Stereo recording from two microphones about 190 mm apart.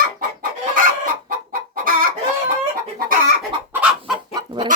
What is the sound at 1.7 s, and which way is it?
Chicken, 50° right (ahead or behind).